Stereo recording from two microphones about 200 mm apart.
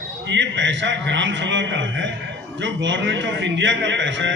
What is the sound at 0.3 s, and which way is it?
A man's voice, 65° right (ahead or behind).